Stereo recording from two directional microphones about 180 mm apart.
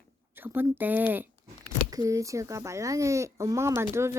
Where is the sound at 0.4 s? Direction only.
10° right (ahead or behind).